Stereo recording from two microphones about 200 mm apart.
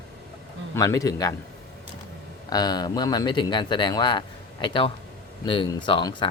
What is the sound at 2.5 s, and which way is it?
Speech, 20° left (ahead or behind).